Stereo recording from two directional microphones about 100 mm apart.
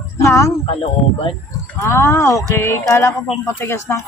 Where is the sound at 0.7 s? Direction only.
65° left (ahead or behind).